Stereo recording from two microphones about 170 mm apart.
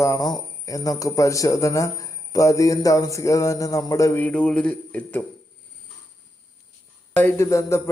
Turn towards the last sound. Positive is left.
turn(degrees=15)  # may be behind; listen again after turning